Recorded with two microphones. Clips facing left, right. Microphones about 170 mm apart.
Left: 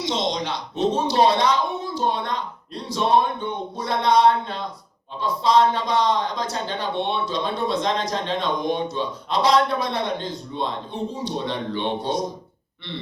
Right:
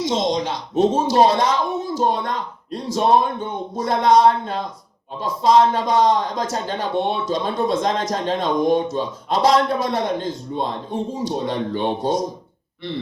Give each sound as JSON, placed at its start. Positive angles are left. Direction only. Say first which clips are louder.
{"t": 0.0, "sound": "a man's voice", "louder": "right 4 dB", "side_deg": -45}